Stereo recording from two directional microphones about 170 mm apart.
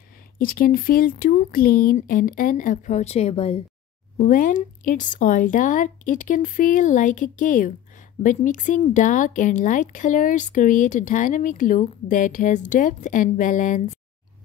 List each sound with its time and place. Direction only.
0.4 s speech: 55° left (ahead or behind); by 3.6 s 35° left (ahead or behind)
4.3 s speech: 50° left (ahead or behind)